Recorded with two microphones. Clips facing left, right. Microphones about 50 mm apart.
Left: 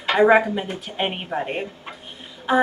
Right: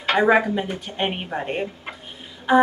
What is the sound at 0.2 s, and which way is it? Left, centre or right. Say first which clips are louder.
A woman's voice: left 3 dB; centre.